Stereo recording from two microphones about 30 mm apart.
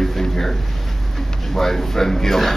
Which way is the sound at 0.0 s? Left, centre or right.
Centre.